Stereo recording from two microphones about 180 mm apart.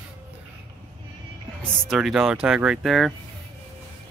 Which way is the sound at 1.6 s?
Centre (ahead or behind).